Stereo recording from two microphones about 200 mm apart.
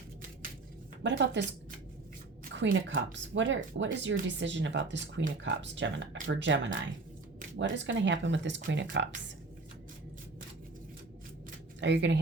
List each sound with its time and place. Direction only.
1.0 s speech: 60° right (ahead or behind)
2.6 s speech: 70° right (ahead or behind)
11.8 s speech: 65° right (ahead or behind)